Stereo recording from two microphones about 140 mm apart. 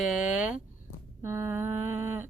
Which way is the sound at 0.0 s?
5° right (ahead or behind).